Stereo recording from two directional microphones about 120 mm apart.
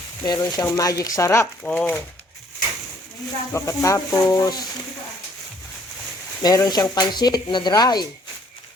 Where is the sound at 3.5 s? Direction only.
25° left (ahead or behind).